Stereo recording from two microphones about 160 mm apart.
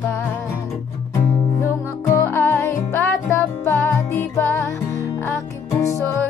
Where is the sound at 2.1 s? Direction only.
15° left (ahead or behind).